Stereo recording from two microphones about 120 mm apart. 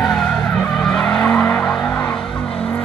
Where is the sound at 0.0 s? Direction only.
5° left (ahead or behind).